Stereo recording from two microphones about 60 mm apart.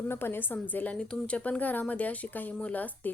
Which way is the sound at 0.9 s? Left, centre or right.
Centre.